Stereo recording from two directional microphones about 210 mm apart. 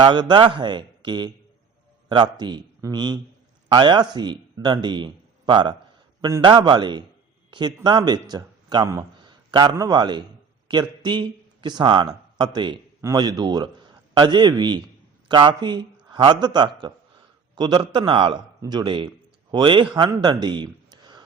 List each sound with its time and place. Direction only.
0.0 s a man's voice: 20° right (ahead or behind)